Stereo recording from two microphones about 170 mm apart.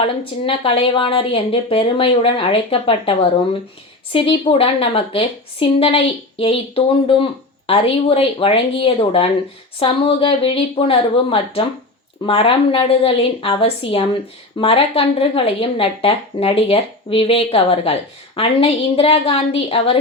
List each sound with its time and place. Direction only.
0.0 s speech: 30° left (ahead or behind)